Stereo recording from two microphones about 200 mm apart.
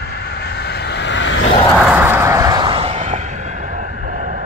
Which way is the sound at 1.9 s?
10° right (ahead or behind).